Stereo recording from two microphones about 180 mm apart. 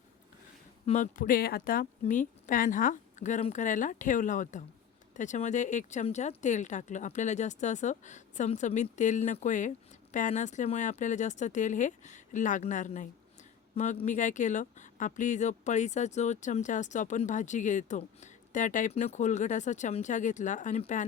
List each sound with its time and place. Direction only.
0.9 s speech: 45° left (ahead or behind)